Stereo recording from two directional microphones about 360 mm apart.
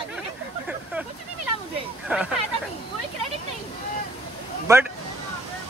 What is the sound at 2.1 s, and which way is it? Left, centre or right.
Speech, centre.